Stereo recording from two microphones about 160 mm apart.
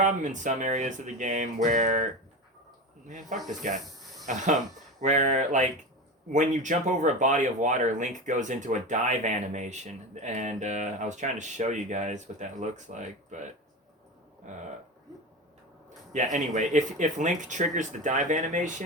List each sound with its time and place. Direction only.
0.0 s speech: 50° right (ahead or behind)
3.1 s speech: 50° right (ahead or behind)
16.1 s speech: 50° right (ahead or behind)